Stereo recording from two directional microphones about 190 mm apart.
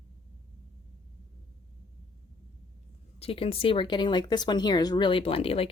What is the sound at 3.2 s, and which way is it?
Speech, 30° left (ahead or behind).